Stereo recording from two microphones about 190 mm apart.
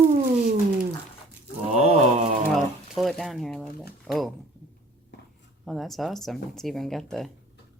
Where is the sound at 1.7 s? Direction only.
35° right (ahead or behind).